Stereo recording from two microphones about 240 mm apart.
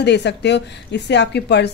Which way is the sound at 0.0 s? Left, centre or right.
Left.